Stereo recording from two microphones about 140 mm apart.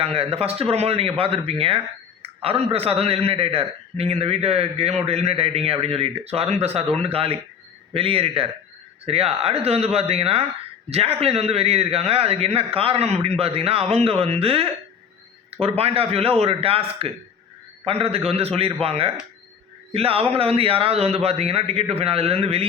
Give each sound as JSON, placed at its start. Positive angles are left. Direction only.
{"t": 0.0, "sound": "a man's voice", "side_deg": -45}